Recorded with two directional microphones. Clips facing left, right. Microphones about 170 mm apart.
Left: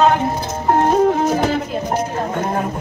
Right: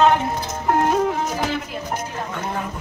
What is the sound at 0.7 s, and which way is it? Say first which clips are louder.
Music: left 5 dB; 35° left (ahead or behind).